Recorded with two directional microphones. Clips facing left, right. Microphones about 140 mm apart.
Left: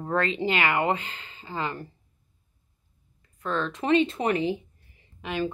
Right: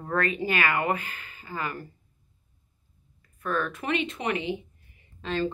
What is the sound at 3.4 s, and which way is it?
Speech, 20° left (ahead or behind).